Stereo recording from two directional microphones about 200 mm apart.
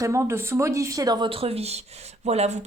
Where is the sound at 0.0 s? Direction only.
15° right (ahead or behind).